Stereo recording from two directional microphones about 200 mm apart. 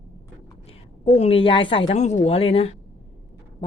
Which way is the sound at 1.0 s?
30° left (ahead or behind).